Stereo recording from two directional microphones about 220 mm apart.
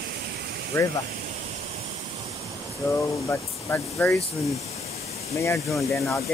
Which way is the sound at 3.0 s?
15° left (ahead or behind).